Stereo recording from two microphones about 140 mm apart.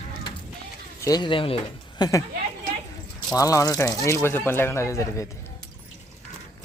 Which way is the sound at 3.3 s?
25° left (ahead or behind).